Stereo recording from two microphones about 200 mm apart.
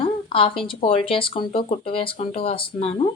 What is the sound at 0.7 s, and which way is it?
A woman's voice, 25° left (ahead or behind).